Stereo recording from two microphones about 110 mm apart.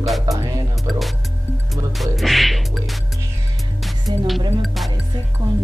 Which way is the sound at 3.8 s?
Centre (ahead or behind).